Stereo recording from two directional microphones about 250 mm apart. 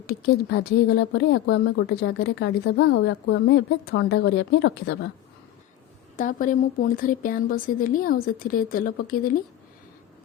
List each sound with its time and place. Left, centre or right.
0.1 s speech: left
0.9 s a woman's voice: left
6.1 s speech: left